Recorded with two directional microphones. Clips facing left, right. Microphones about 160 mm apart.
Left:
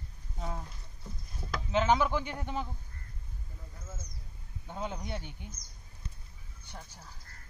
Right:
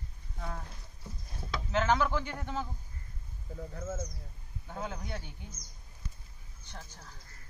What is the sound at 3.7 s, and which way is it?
Speech, 55° right (ahead or behind).